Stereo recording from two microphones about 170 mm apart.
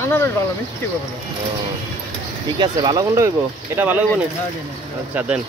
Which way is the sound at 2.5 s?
25° right (ahead or behind).